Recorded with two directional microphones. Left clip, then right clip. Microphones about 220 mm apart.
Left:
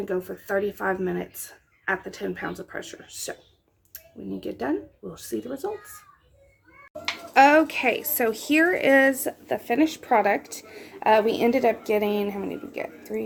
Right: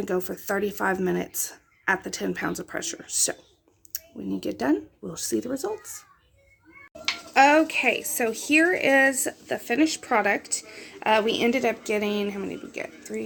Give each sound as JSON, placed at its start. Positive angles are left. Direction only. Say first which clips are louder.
{"t": 0.0, "sound": "speech", "louder": "right 1 dB", "side_deg": -35}
{"t": 7.3, "sound": "speech", "louder": "left 1 dB", "side_deg": 0}